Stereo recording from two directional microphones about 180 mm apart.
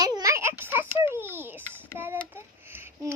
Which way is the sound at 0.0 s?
20° right (ahead or behind).